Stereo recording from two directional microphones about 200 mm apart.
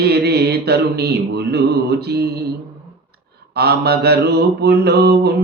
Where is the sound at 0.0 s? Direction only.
55° right (ahead or behind).